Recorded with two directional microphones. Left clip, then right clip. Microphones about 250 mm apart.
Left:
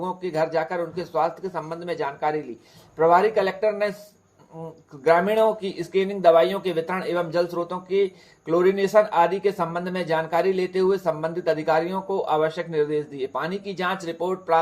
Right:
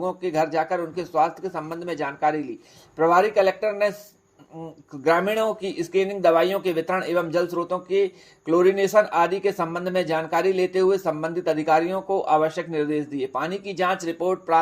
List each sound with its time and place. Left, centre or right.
0.0 s speech: right
5.0 s speech: right